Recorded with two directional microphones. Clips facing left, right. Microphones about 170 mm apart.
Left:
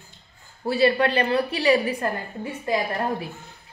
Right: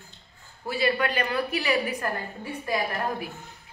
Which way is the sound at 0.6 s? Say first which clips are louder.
Left 6 dB; 35° left (ahead or behind).